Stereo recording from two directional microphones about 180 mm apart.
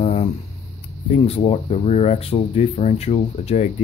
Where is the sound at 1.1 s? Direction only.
35° left (ahead or behind).